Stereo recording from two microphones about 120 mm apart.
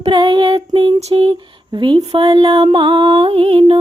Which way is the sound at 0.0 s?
40° right (ahead or behind).